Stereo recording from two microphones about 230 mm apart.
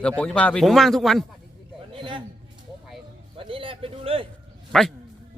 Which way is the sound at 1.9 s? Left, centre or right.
Right.